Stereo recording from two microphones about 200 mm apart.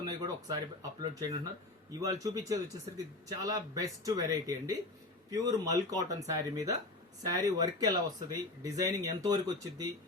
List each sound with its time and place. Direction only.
0.0 s speech: 20° right (ahead or behind)